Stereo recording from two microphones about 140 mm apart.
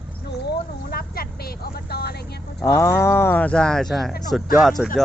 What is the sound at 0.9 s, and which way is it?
Vehicle, 90° left.